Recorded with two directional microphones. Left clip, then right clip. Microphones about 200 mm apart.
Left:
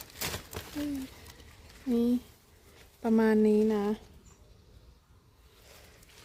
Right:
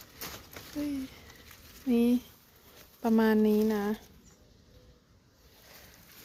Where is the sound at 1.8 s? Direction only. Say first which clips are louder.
Right 2 dB; centre (ahead or behind).